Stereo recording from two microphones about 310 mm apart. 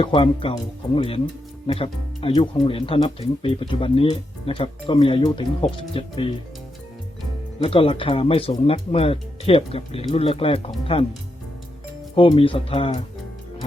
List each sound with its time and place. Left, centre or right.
0.0 s speech: centre
7.6 s speech: centre
12.1 s speech: centre